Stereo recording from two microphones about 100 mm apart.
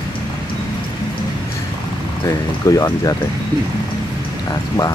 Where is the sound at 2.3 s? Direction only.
35° left (ahead or behind).